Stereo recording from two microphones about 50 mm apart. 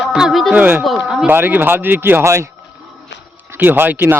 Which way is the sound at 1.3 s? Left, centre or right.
Right.